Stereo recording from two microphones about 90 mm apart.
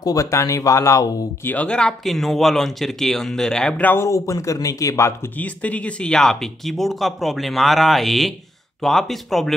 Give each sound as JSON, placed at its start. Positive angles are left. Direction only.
{"t": 0.0, "sound": "speech", "side_deg": 40}
{"t": 1.5, "sound": "speech", "side_deg": 15}
{"t": 3.8, "sound": "speech", "side_deg": 30}
{"t": 5.4, "sound": "speech", "side_deg": 15}